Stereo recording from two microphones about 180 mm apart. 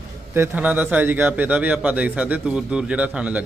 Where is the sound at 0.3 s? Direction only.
10° right (ahead or behind).